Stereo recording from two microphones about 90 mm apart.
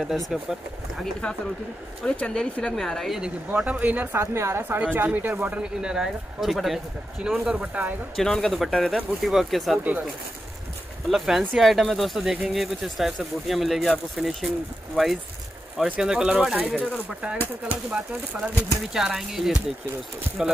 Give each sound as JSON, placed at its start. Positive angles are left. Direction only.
{"t": 0.3, "sound": "speech", "side_deg": -5}
{"t": 2.0, "sound": "speech", "side_deg": 10}
{"t": 3.2, "sound": "speech", "side_deg": -15}
{"t": 8.2, "sound": "speech", "side_deg": 5}
{"t": 11.1, "sound": "speech", "side_deg": -5}
{"t": 15.8, "sound": "speech", "side_deg": -5}